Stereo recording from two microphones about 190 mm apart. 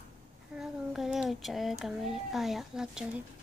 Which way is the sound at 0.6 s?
Centre (ahead or behind).